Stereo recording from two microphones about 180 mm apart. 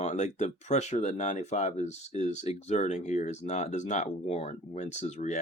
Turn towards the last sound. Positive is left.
turn(degrees=40)  # may be behind; listen again after turning